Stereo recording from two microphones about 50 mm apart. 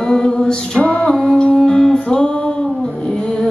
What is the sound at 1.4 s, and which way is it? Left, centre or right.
Music, centre.